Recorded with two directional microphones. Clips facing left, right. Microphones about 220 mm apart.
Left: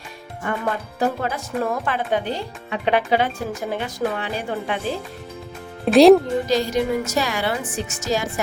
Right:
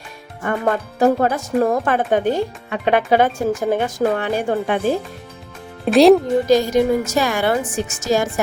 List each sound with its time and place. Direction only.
0.4 s speech: 50° right (ahead or behind)
5.8 s speech: centre (ahead or behind)
6.5 s speech: 50° right (ahead or behind)